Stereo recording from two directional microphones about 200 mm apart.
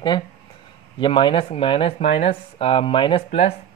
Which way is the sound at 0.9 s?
25° left (ahead or behind).